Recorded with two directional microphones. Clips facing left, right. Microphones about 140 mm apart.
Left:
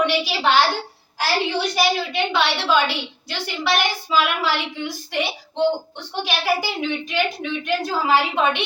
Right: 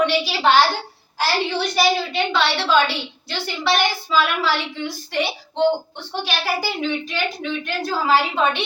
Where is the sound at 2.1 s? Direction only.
15° left (ahead or behind).